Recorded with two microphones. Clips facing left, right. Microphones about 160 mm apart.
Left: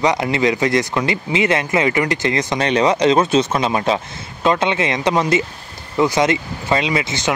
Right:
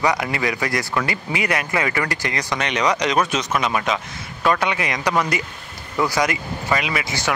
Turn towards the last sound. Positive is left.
turn(degrees=20)  # may be behind; listen again after turning